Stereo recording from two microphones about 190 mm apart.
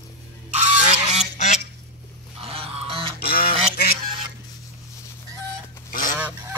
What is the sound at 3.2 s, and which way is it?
Duck, 50° left (ahead or behind).